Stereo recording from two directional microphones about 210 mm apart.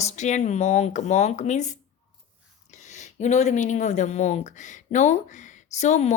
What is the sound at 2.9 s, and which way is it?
A woman's voice, 35° left (ahead or behind).